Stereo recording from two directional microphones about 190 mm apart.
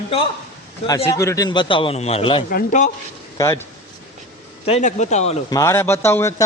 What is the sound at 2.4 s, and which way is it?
Speech, 45° left (ahead or behind).